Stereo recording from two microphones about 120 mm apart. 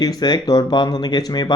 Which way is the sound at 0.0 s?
35° left (ahead or behind).